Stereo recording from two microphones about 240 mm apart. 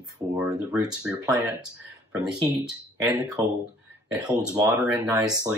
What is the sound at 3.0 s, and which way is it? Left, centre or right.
Speech, centre.